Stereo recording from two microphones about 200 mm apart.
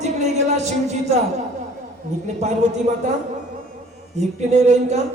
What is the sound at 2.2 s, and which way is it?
Speech, 35° right (ahead or behind).